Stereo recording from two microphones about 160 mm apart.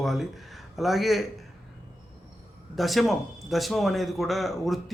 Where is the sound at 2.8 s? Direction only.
Centre (ahead or behind).